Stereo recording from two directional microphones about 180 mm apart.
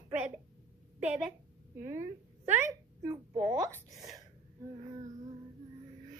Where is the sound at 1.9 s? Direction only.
15° right (ahead or behind).